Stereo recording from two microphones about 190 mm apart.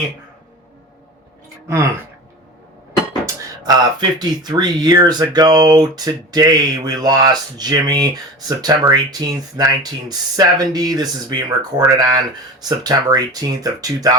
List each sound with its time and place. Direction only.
3.6 s speech: 20° right (ahead or behind)